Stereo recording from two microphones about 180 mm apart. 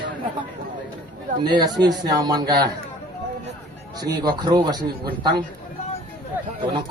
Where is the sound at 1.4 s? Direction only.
25° right (ahead or behind).